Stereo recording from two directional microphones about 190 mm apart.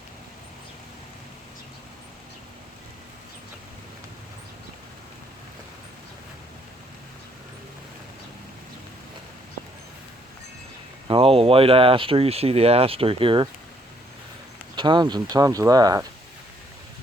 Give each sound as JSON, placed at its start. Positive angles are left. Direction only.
{"t": 11.1, "sound": "speech", "side_deg": -30}
{"t": 14.8, "sound": "speech", "side_deg": -25}